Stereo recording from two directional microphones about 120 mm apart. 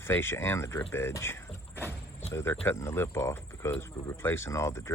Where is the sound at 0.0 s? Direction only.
20° left (ahead or behind).